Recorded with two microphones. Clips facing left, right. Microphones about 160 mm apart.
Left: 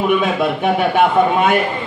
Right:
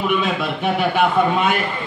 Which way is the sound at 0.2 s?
50° left (ahead or behind).